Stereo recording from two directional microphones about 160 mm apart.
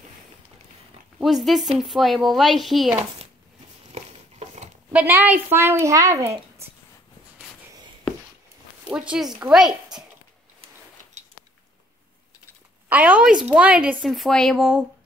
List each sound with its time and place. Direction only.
1.2 s a woman's voice: centre (ahead or behind)
3.9 s a sound: 45° right (ahead or behind)
4.9 s a woman's voice: 10° right (ahead or behind)
8.8 s a woman's voice: 5° right (ahead or behind)
12.9 s a woman's voice: 10° right (ahead or behind)